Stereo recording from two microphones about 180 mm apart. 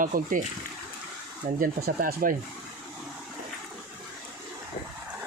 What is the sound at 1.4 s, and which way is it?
Speech, 50° right (ahead or behind).